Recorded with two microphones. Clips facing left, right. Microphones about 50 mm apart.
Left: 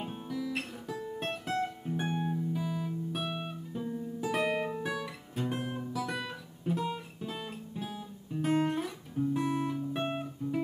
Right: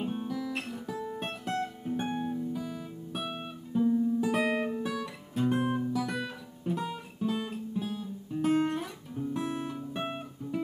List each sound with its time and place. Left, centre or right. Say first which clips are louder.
0.0 s guitar: right 3 dB; centre
3.1 s music: left 1 dB; centre
4.4 s music: right 2 dB; centre
4.7 s guitar: right 1 dB; centre
5.3 s guitar: right 7 dB; centre